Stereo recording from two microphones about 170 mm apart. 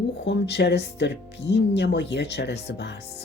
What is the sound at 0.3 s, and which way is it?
Speech, 80° left.